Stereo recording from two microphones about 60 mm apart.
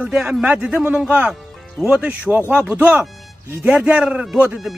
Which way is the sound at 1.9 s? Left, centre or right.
Right.